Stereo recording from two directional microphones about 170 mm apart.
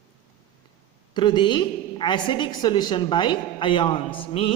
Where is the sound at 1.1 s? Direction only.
25° left (ahead or behind).